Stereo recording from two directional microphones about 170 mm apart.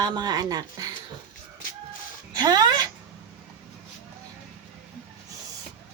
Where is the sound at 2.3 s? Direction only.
25° right (ahead or behind).